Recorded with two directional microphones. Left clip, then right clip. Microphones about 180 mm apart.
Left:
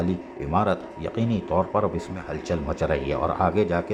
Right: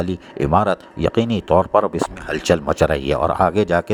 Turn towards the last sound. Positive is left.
turn(degrees=-50)  # may be behind; listen again after turning